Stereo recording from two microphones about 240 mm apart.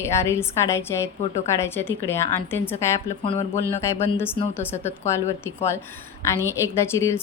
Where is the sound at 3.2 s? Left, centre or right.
Left.